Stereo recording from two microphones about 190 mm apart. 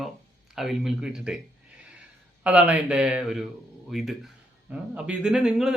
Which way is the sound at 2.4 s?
5° right (ahead or behind).